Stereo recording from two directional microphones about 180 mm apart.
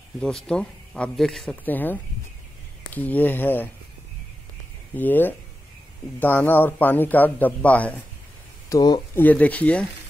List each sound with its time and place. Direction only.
0.2 s speech: 5° left (ahead or behind)
4.9 s speech: 10° left (ahead or behind)
8.6 s speech: 20° left (ahead or behind)
9.1 s speech: 10° left (ahead or behind)